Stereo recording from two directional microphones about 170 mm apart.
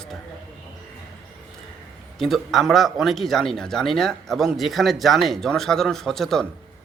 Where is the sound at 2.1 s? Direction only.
Centre (ahead or behind).